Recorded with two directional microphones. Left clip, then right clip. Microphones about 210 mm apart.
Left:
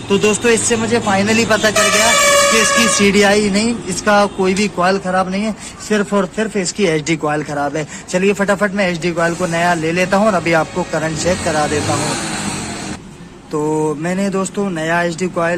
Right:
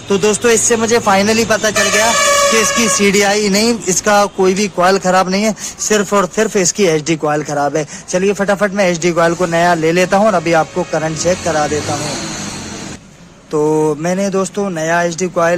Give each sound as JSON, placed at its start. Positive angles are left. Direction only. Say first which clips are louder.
{"t": 0.1, "sound": "speech", "louder": "right 1 dB", "side_deg": -40}
{"t": 13.5, "sound": "speech", "louder": "right 4 dB", "side_deg": -40}